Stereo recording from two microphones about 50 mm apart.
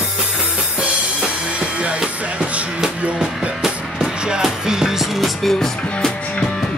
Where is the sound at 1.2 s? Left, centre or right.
Right.